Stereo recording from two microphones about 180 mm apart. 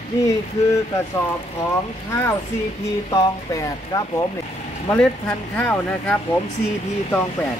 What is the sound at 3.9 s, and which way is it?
Speech, 20° left (ahead or behind).